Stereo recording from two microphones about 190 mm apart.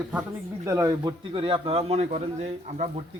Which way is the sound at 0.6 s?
15° right (ahead or behind).